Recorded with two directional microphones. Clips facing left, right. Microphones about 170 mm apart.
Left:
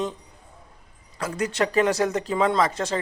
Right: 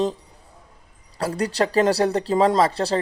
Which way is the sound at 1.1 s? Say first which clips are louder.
Right 3 dB; 35° right (ahead or behind).